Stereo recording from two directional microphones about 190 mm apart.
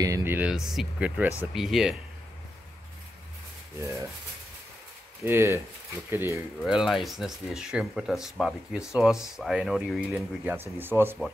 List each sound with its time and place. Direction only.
0.0 s speech: 15° right (ahead or behind)
3.8 s speech: 15° right (ahead or behind)
5.2 s speech: 10° right (ahead or behind)
6.6 s speech: centre (ahead or behind)